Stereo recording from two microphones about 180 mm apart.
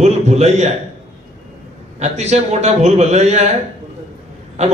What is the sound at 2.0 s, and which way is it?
A man's voice, 40° right (ahead or behind).